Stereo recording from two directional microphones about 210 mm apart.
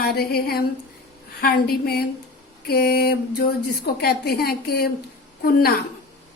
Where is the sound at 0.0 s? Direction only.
45° left (ahead or behind).